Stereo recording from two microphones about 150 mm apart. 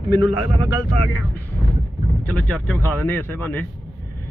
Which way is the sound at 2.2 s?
10° left (ahead or behind).